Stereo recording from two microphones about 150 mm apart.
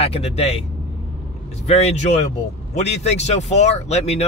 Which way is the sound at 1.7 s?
45° left (ahead or behind).